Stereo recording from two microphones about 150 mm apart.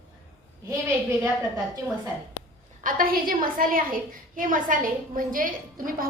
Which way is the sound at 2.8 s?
70° right (ahead or behind).